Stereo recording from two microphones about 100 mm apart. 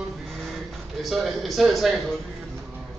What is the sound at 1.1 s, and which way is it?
Speech, centre (ahead or behind).